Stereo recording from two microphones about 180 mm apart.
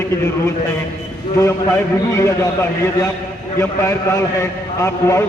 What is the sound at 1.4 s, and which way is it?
A man's voice, 15° left (ahead or behind).